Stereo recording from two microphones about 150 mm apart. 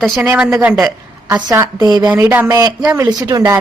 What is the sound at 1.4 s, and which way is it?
Speech, 25° right (ahead or behind).